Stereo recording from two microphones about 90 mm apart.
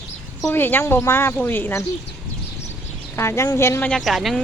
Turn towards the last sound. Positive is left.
turn(degrees=0)  # may be behind; listen again after turning